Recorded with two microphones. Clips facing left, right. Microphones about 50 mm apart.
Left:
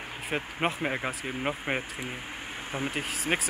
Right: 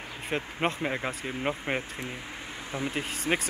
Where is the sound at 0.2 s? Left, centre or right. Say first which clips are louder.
Even; centre.